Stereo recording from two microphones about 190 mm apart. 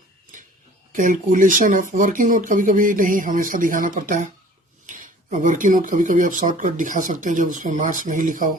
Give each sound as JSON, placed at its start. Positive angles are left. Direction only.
{"t": 0.9, "sound": "speech", "side_deg": -45}